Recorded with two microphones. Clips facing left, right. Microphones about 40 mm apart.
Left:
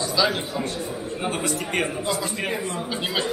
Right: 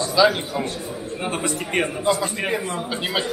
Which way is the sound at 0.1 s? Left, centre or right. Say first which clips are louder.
Right 7 dB; centre.